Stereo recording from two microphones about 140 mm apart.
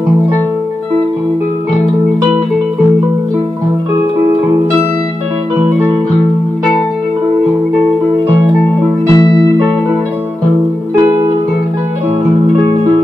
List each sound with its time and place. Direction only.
9.1 s music: 30° left (ahead or behind)